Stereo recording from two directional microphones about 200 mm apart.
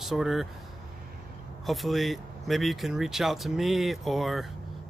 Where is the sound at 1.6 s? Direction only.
Centre (ahead or behind).